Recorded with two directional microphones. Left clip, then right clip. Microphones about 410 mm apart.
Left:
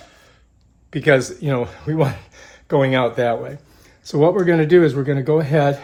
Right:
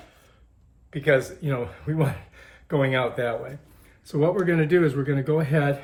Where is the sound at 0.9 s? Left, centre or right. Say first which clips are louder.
Left 6 dB; left.